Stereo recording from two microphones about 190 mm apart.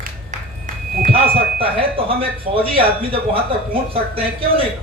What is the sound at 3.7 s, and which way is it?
Speech, 30° right (ahead or behind).